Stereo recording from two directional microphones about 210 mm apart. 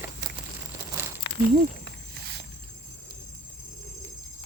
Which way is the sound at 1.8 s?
50° right (ahead or behind).